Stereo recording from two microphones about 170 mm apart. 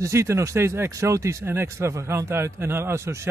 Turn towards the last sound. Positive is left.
turn(degrees=-15)  # may be behind; listen again after turning